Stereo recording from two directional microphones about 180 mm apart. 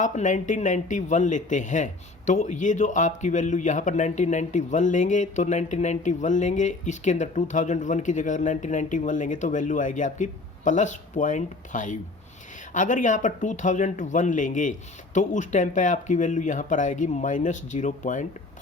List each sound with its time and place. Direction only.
0.0 s speech: 45° left (ahead or behind)